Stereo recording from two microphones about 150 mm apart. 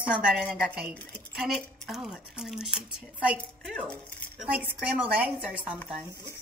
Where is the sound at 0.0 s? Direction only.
5° right (ahead or behind).